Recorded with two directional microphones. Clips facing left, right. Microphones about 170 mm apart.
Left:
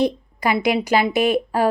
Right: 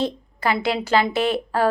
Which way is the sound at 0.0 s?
15° left (ahead or behind).